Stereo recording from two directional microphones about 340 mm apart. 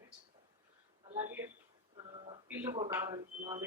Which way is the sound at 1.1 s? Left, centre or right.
Centre.